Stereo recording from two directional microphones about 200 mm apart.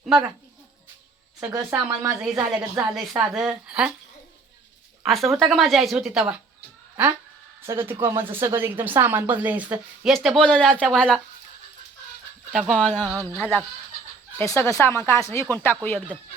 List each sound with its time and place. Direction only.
1.5 s a woman's voice: 15° right (ahead or behind)
5.0 s a woman's voice: centre (ahead or behind)
12.5 s a woman's voice: centre (ahead or behind)
14.3 s speech: 15° left (ahead or behind)